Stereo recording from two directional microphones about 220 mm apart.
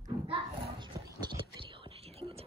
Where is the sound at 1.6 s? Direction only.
25° right (ahead or behind).